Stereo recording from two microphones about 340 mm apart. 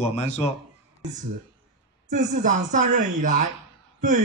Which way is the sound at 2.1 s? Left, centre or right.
Right.